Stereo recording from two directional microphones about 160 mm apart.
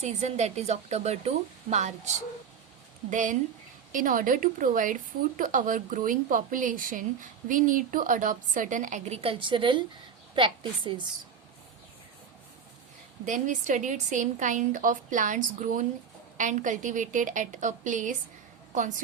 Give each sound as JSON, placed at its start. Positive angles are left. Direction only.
{"t": 0.0, "sound": "a woman's voice", "side_deg": -45}
{"t": 3.1, "sound": "a woman's voice", "side_deg": -50}
{"t": 13.2, "sound": "a woman's voice", "side_deg": -50}